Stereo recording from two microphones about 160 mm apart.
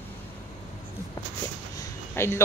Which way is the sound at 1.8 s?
15° left (ahead or behind).